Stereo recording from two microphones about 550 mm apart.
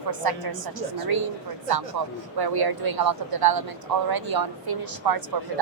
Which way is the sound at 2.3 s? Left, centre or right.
Right.